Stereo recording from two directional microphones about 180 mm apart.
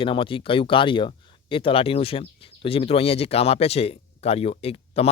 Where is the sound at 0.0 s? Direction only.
30° left (ahead or behind).